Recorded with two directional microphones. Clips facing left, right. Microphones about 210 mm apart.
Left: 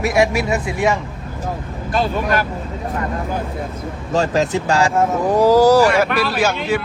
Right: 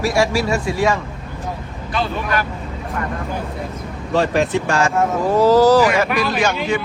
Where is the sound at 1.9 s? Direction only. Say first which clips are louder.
Left 3 dB; 50° left (ahead or behind).